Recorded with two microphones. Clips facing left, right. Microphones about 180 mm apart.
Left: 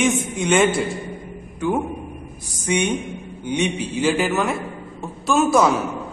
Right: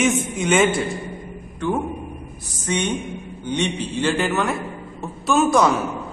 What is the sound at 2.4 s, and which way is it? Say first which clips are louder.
A woman's voice: left 2 dB; 10° left (ahead or behind).